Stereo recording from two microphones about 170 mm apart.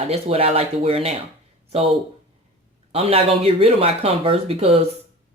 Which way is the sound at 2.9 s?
35° right (ahead or behind).